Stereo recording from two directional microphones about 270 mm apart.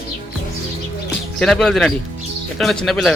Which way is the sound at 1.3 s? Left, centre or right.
Centre.